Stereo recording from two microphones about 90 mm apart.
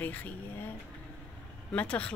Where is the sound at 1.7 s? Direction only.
15° left (ahead or behind).